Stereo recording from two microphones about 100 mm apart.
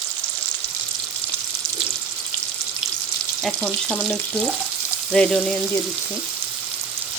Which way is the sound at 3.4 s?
5° left (ahead or behind).